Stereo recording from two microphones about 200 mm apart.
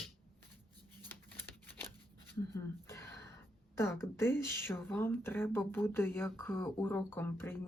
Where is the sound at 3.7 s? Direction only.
15° left (ahead or behind).